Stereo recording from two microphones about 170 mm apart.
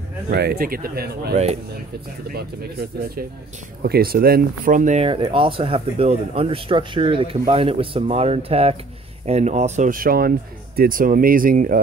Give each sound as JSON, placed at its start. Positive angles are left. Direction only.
{"t": 0.3, "sound": "speech", "side_deg": -70}
{"t": 1.3, "sound": "speech", "side_deg": -40}
{"t": 2.2, "sound": "speech", "side_deg": -65}
{"t": 5.0, "sound": "speech", "side_deg": -30}